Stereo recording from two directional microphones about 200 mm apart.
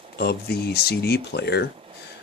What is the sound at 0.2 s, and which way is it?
Speech, 55° left (ahead or behind).